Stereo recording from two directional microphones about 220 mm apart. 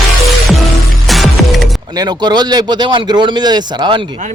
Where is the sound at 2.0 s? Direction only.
20° right (ahead or behind).